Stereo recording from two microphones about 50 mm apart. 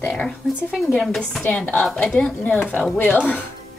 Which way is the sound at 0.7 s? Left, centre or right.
Left.